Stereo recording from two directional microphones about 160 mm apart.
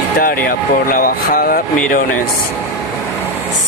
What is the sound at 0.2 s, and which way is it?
Speech, 65° left (ahead or behind).